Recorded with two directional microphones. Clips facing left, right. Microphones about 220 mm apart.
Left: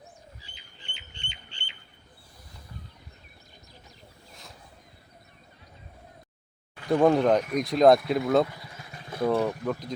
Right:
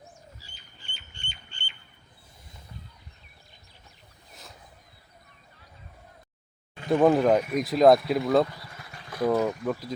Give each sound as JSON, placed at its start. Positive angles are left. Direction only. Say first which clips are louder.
{"t": 0.8, "sound": "rodents", "louder": "left 2 dB", "side_deg": 20}
{"t": 1.5, "sound": "bird", "louder": "even", "side_deg": 70}
{"t": 6.7, "sound": "a sound", "louder": "right 1 dB", "side_deg": -20}
{"t": 7.0, "sound": "speech", "louder": "right 1 dB", "side_deg": -5}
{"t": 8.6, "sound": "vehicle", "louder": "left 1 dB", "side_deg": 15}
{"t": 9.2, "sound": "speech", "louder": "right 1 dB", "side_deg": -5}